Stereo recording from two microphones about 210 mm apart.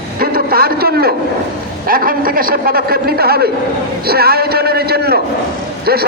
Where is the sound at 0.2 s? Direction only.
45° right (ahead or behind).